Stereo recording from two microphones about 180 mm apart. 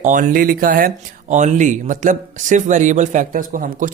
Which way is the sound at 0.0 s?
45° right (ahead or behind).